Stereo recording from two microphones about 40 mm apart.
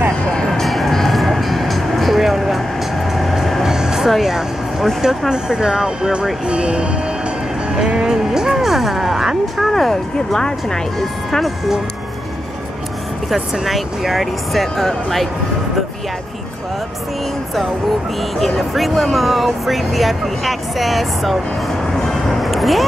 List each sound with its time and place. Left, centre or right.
0.5 s music: centre
3.6 s vehicle: centre
5.3 s speech: centre
9.7 s speech: centre
10.1 s speech: centre
11.4 s speech: centre
13.3 s speech: centre
18.6 s speech: centre
22.4 s a sound: centre